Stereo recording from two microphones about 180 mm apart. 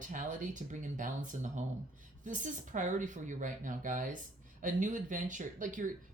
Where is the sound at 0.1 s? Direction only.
45° right (ahead or behind).